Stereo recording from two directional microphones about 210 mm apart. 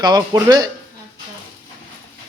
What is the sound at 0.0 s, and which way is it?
Speech, 20° right (ahead or behind).